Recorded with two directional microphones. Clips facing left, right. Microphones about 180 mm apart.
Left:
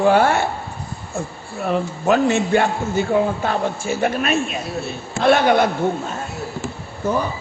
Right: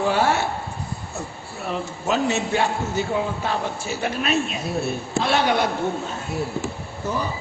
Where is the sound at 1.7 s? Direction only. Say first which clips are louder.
Left 6 dB; 55° left (ahead or behind).